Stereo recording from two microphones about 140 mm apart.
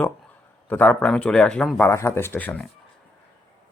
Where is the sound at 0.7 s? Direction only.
10° left (ahead or behind).